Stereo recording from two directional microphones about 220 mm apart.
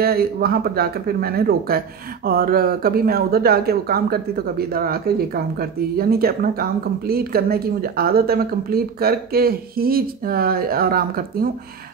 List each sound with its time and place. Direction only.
0.0 s speech: 45° right (ahead or behind)